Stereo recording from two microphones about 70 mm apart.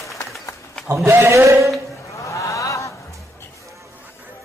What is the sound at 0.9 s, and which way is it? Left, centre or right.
Speech, right.